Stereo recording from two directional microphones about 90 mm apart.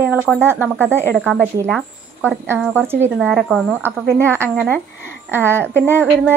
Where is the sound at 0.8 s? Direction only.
25° right (ahead or behind).